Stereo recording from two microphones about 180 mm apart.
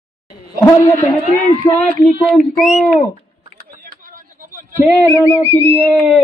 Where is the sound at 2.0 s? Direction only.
Centre (ahead or behind).